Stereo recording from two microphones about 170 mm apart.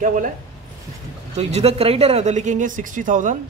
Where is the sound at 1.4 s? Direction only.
40° right (ahead or behind).